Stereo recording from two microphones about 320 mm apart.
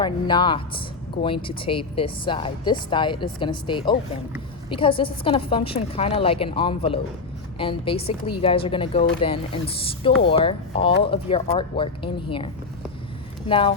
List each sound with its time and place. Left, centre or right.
0.0 s a woman's voice: centre
13.5 s a woman's voice: centre